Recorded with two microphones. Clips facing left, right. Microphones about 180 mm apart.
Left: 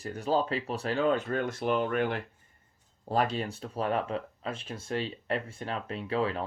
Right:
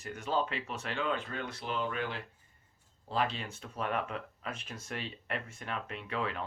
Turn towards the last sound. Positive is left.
turn(degrees=35)  # may be behind; listen again after turning